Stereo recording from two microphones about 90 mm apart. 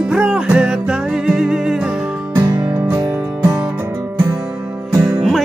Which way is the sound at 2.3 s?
45° right (ahead or behind).